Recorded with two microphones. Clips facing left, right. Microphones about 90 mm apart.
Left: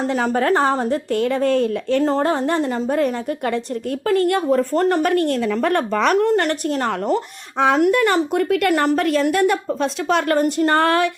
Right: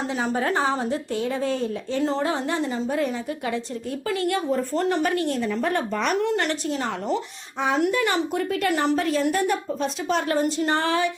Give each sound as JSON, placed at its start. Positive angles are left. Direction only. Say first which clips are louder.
{"t": 0.1, "sound": "a woman's voice", "louder": "left 6 dB", "side_deg": 60}
{"t": 2.0, "sound": "a woman's voice", "louder": "left 6 dB", "side_deg": 45}
{"t": 5.4, "sound": "speech", "louder": "left 5 dB", "side_deg": 80}
{"t": 6.1, "sound": "a woman's voice", "louder": "left 6 dB", "side_deg": 50}